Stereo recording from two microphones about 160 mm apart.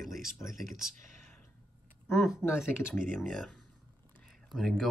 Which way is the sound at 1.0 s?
50° right (ahead or behind).